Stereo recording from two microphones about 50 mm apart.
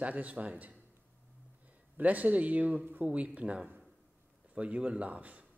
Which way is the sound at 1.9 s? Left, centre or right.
Right.